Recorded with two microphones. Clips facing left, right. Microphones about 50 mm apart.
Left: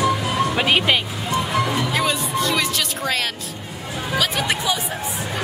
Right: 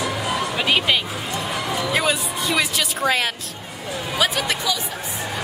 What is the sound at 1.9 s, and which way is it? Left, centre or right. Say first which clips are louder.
Music: even; centre.